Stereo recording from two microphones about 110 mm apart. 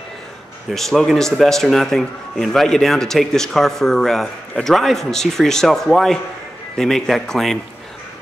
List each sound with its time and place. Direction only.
0.7 s speech: 5° left (ahead or behind)